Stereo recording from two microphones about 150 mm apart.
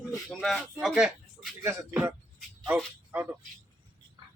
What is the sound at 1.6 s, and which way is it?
Speech, 20° right (ahead or behind).